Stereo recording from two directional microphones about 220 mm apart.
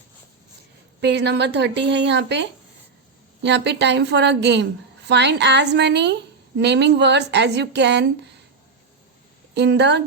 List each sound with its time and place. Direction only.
1.0 s a woman's voice: 50° right (ahead or behind)
9.6 s a woman's voice: 50° right (ahead or behind)